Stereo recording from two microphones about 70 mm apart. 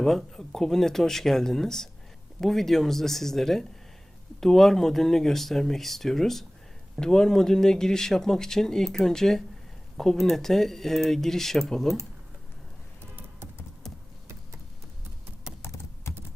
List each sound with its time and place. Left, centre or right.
0.0 s speech: centre
15.6 s typing: left